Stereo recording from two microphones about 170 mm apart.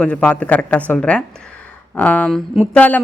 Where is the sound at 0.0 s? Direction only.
5° left (ahead or behind).